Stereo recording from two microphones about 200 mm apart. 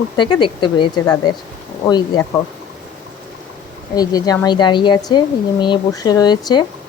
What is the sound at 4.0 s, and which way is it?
Speech, 20° left (ahead or behind).